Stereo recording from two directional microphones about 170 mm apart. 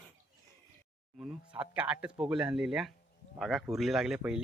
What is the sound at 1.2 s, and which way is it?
Speech, 5° right (ahead or behind).